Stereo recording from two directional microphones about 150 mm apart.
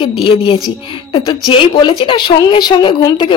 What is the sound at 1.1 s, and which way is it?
A woman's voice, 30° left (ahead or behind).